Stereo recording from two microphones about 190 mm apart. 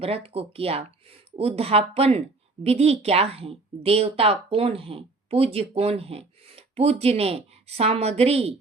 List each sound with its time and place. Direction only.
0.0 s a woman's voice: 30° right (ahead or behind)